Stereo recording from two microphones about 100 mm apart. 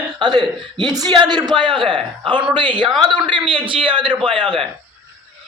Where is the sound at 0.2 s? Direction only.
45° right (ahead or behind).